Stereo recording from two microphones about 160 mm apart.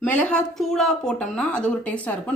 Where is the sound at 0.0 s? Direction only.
10° left (ahead or behind).